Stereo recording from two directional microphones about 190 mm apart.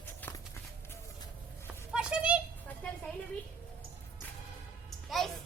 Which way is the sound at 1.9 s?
5° right (ahead or behind).